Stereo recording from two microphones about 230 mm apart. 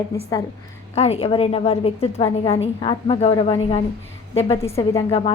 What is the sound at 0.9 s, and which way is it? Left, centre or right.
A woman's voice, left.